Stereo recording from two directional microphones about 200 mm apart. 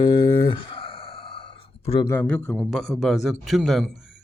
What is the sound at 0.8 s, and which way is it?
Sigh, 25° left (ahead or behind).